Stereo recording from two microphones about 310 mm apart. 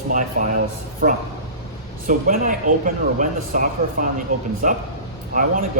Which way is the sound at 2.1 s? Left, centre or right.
Right.